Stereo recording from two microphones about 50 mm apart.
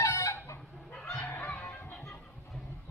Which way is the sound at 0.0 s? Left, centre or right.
Left.